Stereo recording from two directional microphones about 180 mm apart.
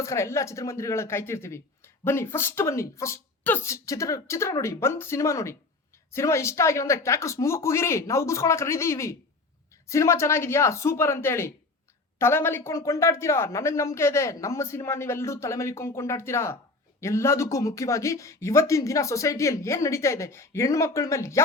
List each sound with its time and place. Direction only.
0.0 s speech: 15° left (ahead or behind)